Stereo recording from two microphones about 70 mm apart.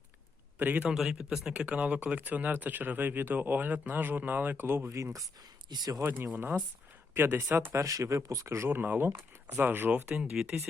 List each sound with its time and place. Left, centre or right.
0.6 s speech: right
0.9 s speech: centre; by 4.9 s right
4.9 s speech: right
5.6 s speech: right
6.0 s speech: right
7.8 s speech: right
8.7 s speech: right
10.3 s speech: centre